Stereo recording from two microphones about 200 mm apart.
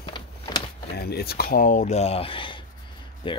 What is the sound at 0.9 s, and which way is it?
Speech, 50° left (ahead or behind).